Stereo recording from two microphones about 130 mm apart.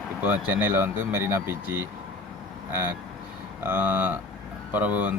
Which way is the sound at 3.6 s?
15° right (ahead or behind).